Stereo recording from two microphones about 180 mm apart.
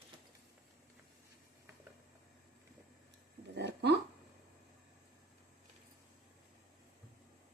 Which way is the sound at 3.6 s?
70° right (ahead or behind).